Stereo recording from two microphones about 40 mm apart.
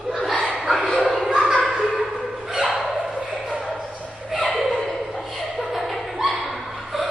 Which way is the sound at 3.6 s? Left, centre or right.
Centre.